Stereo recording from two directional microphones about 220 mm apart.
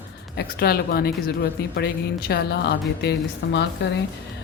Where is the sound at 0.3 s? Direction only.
45° left (ahead or behind).